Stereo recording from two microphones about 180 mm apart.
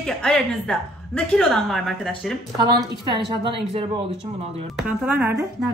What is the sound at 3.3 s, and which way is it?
Speech, 30° right (ahead or behind).